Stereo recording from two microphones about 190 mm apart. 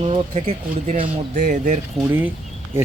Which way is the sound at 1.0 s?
45° right (ahead or behind).